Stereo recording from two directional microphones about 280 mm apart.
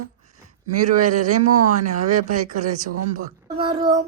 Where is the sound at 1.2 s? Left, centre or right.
Right.